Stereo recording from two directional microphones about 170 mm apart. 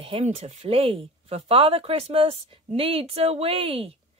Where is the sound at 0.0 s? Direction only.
35° right (ahead or behind).